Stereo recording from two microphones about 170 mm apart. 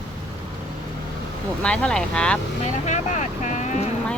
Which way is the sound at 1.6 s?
5° left (ahead or behind).